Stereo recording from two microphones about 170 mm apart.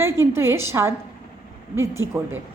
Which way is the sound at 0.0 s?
15° right (ahead or behind).